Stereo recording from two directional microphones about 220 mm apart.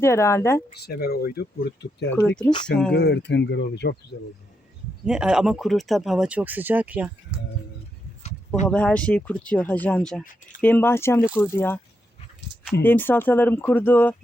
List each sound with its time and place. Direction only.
0.0 s speech: 10° left (ahead or behind)
0.8 s speech: 45° left (ahead or behind)
2.0 s speech: 5° left (ahead or behind)
2.9 s speech: 50° left (ahead or behind)
5.0 s speech: 5° right (ahead or behind)
8.6 s speech: 5° left (ahead or behind)
12.8 s speech: 10° left (ahead or behind)